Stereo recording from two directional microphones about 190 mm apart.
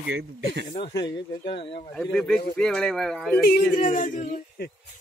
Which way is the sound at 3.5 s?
45° left (ahead or behind).